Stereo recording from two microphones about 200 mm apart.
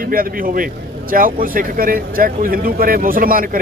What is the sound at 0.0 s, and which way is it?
A man's voice, 45° right (ahead or behind).